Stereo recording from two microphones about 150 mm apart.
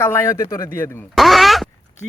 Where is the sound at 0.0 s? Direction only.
15° left (ahead or behind).